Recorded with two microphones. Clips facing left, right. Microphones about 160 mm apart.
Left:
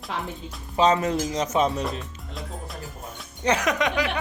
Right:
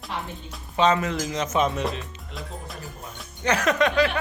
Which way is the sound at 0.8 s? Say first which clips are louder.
Left 1 dB; 35° left (ahead or behind).